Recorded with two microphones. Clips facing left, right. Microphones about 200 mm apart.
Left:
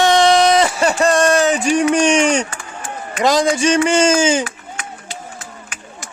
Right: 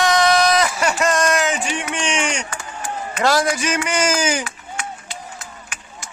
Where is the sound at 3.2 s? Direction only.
20° left (ahead or behind).